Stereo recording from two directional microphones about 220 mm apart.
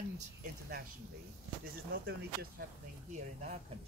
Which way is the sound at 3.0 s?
30° right (ahead or behind).